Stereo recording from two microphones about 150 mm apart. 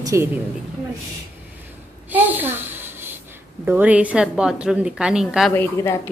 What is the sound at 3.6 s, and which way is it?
A woman's voice, 10° right (ahead or behind).